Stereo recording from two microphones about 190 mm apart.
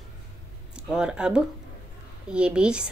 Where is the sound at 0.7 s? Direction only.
5° right (ahead or behind).